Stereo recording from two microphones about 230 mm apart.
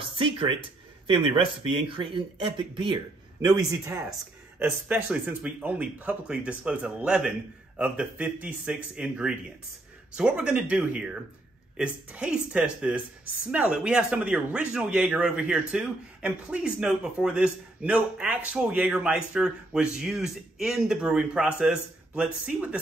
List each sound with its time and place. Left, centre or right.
0.0 s a man's voice: right; by 22.8 s centre